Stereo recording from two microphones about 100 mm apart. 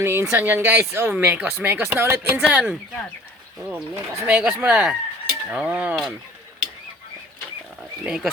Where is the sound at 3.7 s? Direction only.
20° right (ahead or behind).